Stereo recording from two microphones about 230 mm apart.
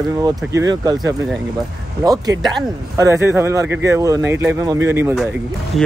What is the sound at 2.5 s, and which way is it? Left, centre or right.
Speech, centre.